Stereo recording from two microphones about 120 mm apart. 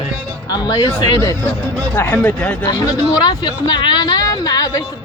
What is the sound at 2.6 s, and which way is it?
Speech, 35° left (ahead or behind).